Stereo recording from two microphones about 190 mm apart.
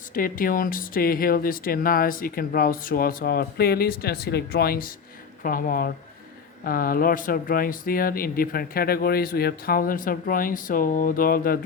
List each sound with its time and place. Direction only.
0.1 s speech: 45° left (ahead or behind)